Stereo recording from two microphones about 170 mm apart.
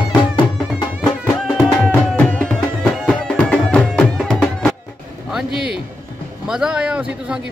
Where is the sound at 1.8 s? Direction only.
5° left (ahead or behind).